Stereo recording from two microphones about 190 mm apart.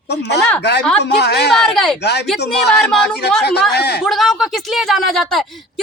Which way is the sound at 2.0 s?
60° left (ahead or behind).